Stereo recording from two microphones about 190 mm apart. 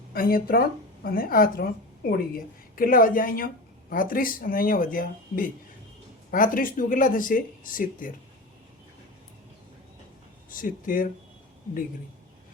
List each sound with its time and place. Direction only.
0.1 s a woman's voice: 50° left (ahead or behind)
10.5 s a woman's voice: 45° left (ahead or behind)